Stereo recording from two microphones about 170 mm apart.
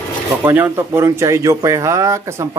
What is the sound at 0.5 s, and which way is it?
Speech, 15° right (ahead or behind).